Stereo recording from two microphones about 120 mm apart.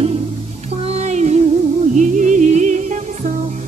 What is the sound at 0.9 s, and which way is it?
Music, 65° right (ahead or behind).